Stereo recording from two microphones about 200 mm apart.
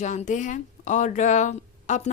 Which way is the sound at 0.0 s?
35° left (ahead or behind).